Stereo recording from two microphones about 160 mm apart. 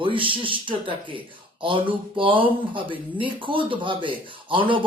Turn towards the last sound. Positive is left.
turn(degrees=-30)  # may be behind; listen again after turning